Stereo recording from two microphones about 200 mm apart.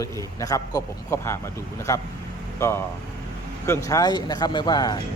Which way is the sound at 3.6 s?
15° left (ahead or behind).